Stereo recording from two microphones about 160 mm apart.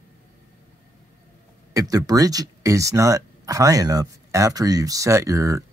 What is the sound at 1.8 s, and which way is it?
Speech, 20° right (ahead or behind).